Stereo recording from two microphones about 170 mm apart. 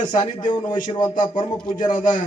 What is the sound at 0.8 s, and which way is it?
Music, 30° left (ahead or behind).